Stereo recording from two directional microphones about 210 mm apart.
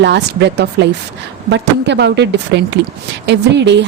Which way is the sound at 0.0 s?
55° right (ahead or behind).